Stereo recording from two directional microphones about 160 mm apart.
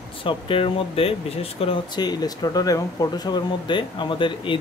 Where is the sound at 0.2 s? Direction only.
35° left (ahead or behind).